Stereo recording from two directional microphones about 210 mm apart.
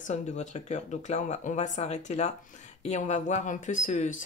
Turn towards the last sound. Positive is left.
turn(degrees=35)  # may be behind; listen again after turning